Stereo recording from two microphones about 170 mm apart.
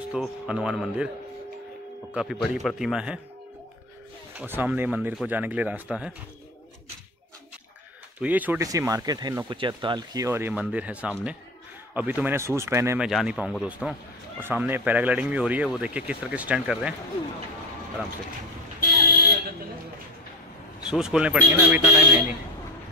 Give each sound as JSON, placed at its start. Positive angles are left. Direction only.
{"t": 0.1, "sound": "speech", "side_deg": -5}
{"t": 2.3, "sound": "speech", "side_deg": 0}
{"t": 4.4, "sound": "speech", "side_deg": -10}
{"t": 8.2, "sound": "speech", "side_deg": -10}
{"t": 13.0, "sound": "speech", "side_deg": -5}
{"t": 20.8, "sound": "speech", "side_deg": -5}